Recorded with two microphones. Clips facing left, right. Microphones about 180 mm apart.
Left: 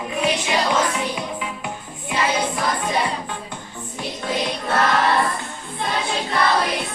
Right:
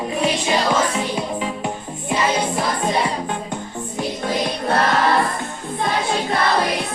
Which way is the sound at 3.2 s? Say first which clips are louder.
Right 6 dB; 45° right (ahead or behind).